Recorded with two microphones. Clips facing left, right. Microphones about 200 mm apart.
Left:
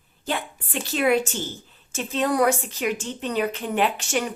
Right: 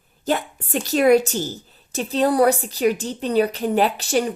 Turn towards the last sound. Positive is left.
turn(degrees=-35)  # may be behind; listen again after turning